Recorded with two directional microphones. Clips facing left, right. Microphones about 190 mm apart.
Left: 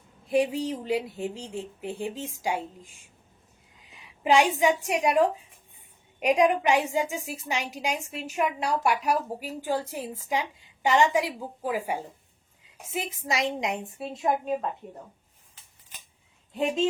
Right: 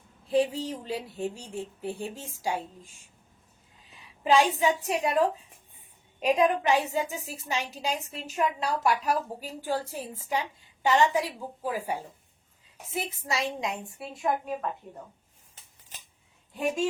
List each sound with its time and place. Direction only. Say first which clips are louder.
0.3 s speech: left 1 dB; 15° left (ahead or behind)
4.2 s speech: left 1 dB; 15° left (ahead or behind)
13.2 s a woman's voice: left 4 dB; 15° left (ahead or behind)